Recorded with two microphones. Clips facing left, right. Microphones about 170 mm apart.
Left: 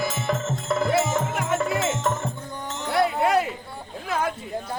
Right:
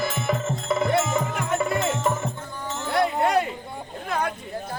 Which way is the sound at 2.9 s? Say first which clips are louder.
Left 1 dB; centre (ahead or behind).